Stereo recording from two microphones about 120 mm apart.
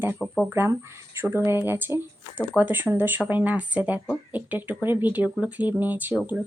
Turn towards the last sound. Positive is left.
turn(degrees=-15)  # may be behind; listen again after turning